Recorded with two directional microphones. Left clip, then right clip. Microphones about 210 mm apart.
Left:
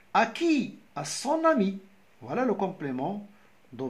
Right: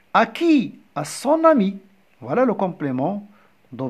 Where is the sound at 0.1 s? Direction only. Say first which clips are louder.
Right 7 dB; 40° right (ahead or behind).